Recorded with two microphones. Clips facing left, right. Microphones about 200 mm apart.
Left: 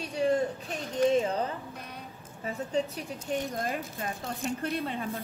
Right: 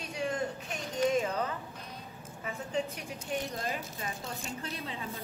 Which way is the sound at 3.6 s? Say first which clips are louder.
Left 3 dB; 50° left (ahead or behind).